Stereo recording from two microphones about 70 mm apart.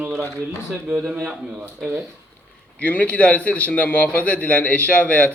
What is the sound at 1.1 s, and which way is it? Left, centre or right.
Speech, centre.